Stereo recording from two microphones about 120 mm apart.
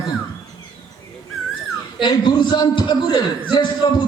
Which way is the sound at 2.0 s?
40° left (ahead or behind).